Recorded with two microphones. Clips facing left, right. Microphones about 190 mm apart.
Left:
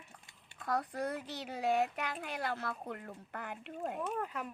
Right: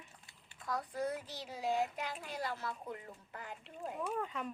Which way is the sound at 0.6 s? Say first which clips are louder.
Left 3 dB; 60° left (ahead or behind).